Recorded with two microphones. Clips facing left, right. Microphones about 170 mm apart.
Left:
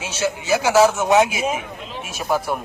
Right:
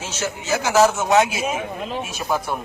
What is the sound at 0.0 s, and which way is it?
A man's voice, 10° left (ahead or behind).